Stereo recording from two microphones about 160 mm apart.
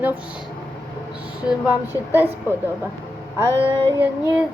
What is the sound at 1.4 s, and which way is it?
A woman's voice, 10° right (ahead or behind).